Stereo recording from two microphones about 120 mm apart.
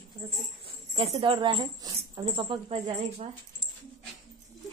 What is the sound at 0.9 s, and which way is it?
Speech, 50° right (ahead or behind).